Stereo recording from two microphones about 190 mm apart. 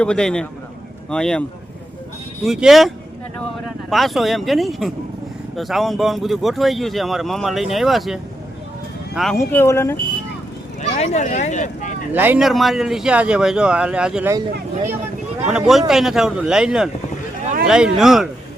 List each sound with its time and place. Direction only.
0.0 s speech: 5° left (ahead or behind)
9.4 s speech: 15° left (ahead or behind)
10.8 s speech: 35° left (ahead or behind)
12.1 s speech: 10° right (ahead or behind)
15.4 s speech: 5° right (ahead or behind)